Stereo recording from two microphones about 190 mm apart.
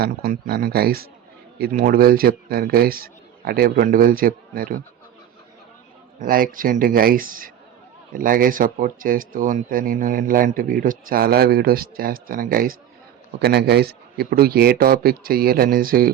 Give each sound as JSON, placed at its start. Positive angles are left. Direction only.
{"t": 0.0, "sound": "speech", "side_deg": -55}
{"t": 6.1, "sound": "speech", "side_deg": -50}